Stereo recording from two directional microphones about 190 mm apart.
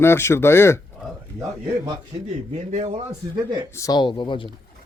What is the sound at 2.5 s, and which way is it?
Speech, 35° right (ahead or behind).